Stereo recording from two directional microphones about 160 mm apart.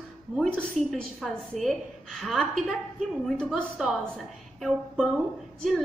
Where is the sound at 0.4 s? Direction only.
5° left (ahead or behind).